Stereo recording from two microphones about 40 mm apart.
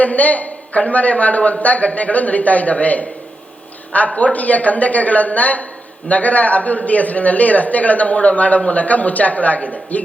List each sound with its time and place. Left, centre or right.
0.0 s a man's voice: left